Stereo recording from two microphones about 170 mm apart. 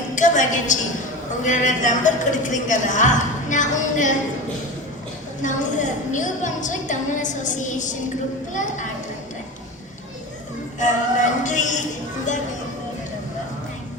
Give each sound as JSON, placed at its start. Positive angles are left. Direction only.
{"t": 0.2, "sound": "a sound", "side_deg": 45}
{"t": 1.5, "sound": "speech", "side_deg": 45}
{"t": 5.4, "sound": "speech", "side_deg": 45}
{"t": 10.8, "sound": "speech", "side_deg": 45}